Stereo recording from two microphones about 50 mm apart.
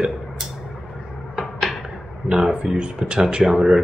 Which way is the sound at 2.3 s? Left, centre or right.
Centre.